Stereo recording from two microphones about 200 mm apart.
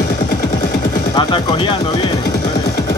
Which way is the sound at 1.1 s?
20° left (ahead or behind).